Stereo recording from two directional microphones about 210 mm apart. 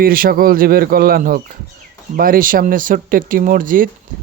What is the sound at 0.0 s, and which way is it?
Speech, 45° right (ahead or behind).